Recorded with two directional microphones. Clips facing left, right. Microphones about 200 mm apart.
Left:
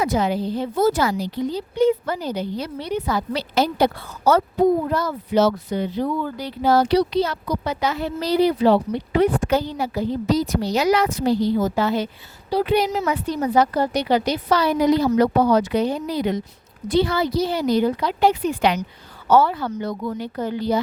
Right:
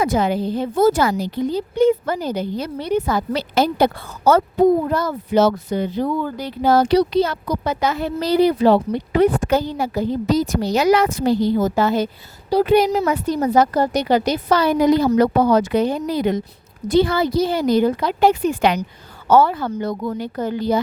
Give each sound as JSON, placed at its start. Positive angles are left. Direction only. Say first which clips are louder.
{"t": 0.0, "sound": "speech", "louder": "right 2 dB", "side_deg": -50}